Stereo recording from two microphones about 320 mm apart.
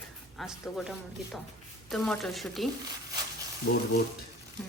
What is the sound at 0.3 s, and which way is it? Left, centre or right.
Speech, centre.